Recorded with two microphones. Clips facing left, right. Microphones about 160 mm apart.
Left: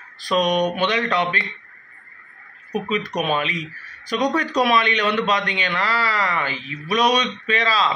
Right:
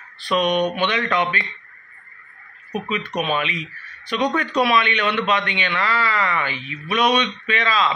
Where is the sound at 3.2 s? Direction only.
40° left (ahead or behind).